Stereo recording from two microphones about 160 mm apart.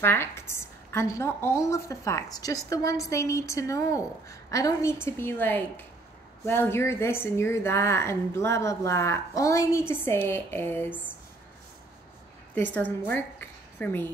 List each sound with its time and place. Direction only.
0.0 s a woman's voice: 15° left (ahead or behind)
12.7 s a woman's voice: 10° left (ahead or behind)